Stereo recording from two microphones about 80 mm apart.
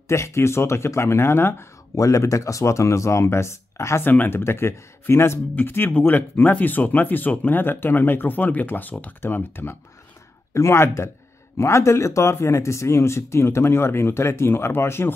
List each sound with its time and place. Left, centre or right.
0.1 s speech: left
4.0 s speech: left